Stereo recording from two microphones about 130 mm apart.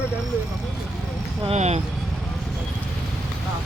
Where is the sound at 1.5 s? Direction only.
55° right (ahead or behind).